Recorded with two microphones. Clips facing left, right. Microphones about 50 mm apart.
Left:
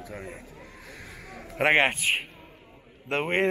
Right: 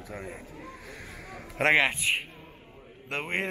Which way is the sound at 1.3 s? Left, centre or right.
Centre.